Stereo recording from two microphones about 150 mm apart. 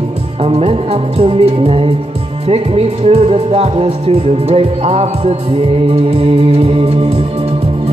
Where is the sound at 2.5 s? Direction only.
45° right (ahead or behind).